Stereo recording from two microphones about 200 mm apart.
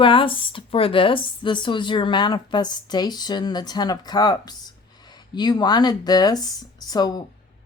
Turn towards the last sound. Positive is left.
turn(degrees=20)  # may be behind; listen again after turning